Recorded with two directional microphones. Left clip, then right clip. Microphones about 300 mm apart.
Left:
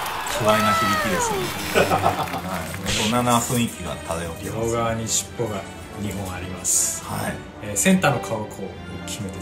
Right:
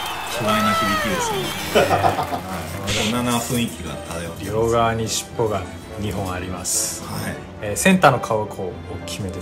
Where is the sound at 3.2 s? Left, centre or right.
Centre.